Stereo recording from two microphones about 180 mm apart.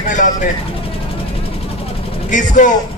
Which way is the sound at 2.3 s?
45° left (ahead or behind).